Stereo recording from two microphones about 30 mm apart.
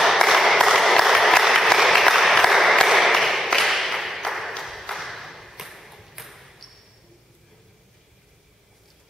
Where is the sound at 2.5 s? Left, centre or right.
Centre.